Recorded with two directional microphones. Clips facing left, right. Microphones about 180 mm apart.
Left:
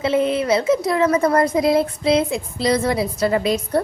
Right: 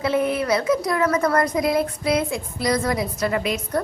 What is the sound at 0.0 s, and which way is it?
A child's voice, 25° left (ahead or behind).